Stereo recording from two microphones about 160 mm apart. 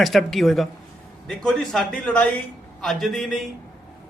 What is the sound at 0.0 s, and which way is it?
A man's voice, centre (ahead or behind).